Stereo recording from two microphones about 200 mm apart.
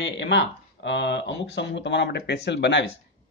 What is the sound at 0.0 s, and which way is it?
Speech, 60° left (ahead or behind).